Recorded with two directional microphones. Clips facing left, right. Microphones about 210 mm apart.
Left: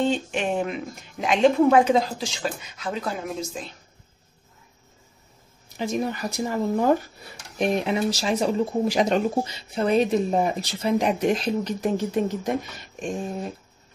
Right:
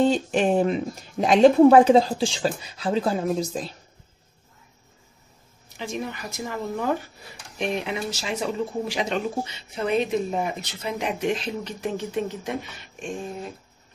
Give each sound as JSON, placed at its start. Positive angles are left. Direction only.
{"t": 0.0, "sound": "speech", "side_deg": -35}
{"t": 5.8, "sound": "speech", "side_deg": 40}